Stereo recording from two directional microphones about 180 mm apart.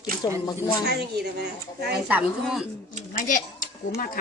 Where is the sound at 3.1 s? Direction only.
50° left (ahead or behind).